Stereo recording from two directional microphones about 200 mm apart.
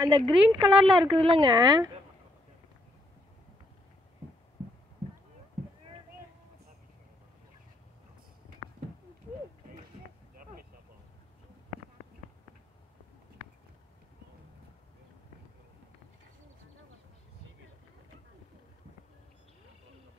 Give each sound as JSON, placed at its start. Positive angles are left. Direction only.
{"t": 0.0, "sound": "speech", "side_deg": -20}
{"t": 0.4, "sound": "a woman's voice", "side_deg": -5}
{"t": 1.1, "sound": "speech", "side_deg": -30}
{"t": 10.3, "sound": "a sound", "side_deg": -45}